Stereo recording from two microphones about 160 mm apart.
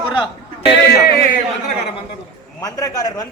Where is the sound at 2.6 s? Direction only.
20° left (ahead or behind).